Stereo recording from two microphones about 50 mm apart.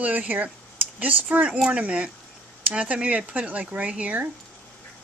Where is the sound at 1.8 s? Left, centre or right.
Right.